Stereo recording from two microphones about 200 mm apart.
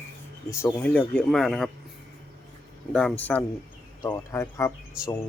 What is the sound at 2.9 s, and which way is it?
Speech, 5° left (ahead or behind).